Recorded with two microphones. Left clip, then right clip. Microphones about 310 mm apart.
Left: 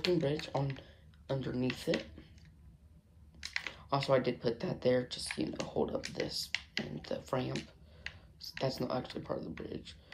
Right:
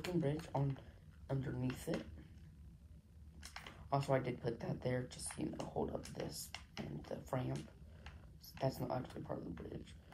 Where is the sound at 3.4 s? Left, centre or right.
Right.